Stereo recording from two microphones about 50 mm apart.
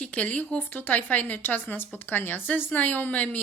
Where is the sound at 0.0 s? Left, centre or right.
Left.